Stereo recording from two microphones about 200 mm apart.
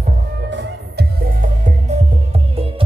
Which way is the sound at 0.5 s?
60° right (ahead or behind).